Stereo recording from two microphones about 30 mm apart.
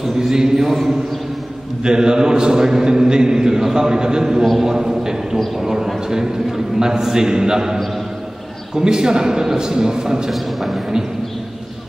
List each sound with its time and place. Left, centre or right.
0.0 s a sound: centre
0.7 s a man's voice: centre
1.8 s a man's voice: right
5.5 s a sound: centre
5.9 s a man's voice: centre
10.3 s a man's voice: centre